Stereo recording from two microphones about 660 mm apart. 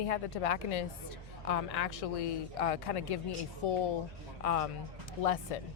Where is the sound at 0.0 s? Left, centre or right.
Left.